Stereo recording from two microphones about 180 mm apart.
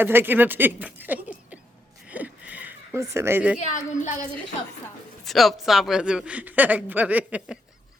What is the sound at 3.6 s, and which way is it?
Speech, 40° left (ahead or behind).